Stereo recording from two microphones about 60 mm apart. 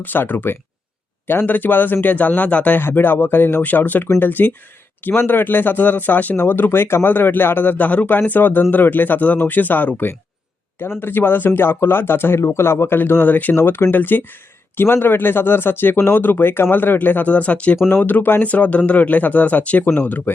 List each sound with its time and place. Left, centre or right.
0.0 s speech: left
2.7 s speech: left
17.8 s speech: left
19.8 s speech: left